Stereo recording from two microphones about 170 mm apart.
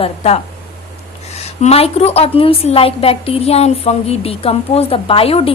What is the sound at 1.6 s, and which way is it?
A woman's voice, 35° left (ahead or behind).